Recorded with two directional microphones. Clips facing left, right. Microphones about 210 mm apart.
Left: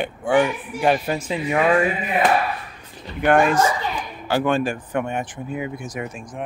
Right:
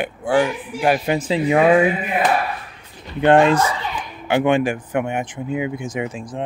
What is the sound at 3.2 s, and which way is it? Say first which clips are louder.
Speech: right 3 dB; 25° right (ahead or behind).